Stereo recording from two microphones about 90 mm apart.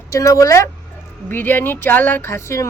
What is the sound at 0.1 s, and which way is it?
Speech, 40° left (ahead or behind).